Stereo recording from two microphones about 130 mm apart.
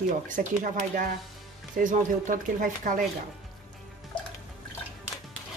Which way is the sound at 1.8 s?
85° right.